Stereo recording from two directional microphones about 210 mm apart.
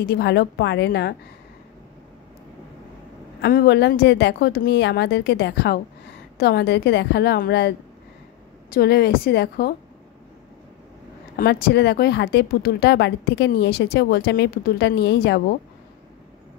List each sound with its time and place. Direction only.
0.0 s a woman's voice: 50° left (ahead or behind)
3.3 s speech: 55° left (ahead or behind)
11.3 s speech: 50° left (ahead or behind)